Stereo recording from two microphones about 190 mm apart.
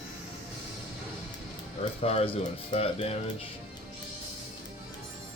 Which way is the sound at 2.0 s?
30° left (ahead or behind).